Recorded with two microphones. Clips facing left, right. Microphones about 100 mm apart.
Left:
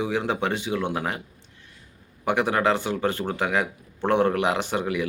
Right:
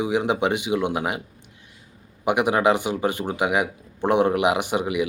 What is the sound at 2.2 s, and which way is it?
Speech, 15° right (ahead or behind).